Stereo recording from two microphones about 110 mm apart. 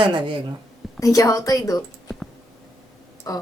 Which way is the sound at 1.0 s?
30° left (ahead or behind).